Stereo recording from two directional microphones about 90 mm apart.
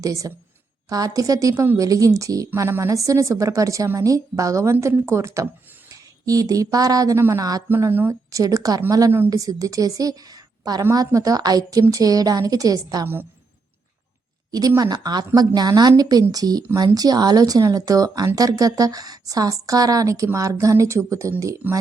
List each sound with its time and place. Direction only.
0.0 s a woman's voice: 40° right (ahead or behind)
7.2 s speech: 30° right (ahead or behind)
8.3 s a woman's voice: 40° right (ahead or behind)
14.8 s a woman's voice: 50° right (ahead or behind)